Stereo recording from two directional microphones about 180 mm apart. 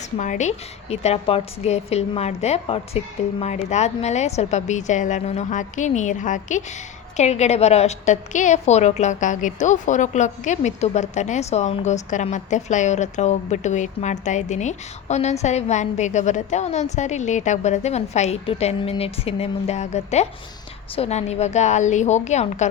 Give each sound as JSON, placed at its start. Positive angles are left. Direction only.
{"t": 0.2, "sound": "a woman's voice", "side_deg": 40}